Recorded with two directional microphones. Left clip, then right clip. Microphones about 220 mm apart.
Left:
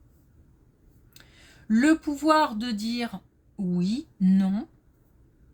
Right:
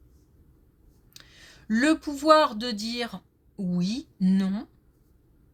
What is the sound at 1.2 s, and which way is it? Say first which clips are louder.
Speech: right 1 dB; 30° right (ahead or behind).